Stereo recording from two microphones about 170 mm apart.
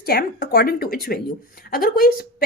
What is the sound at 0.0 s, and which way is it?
A woman's voice, 65° left (ahead or behind).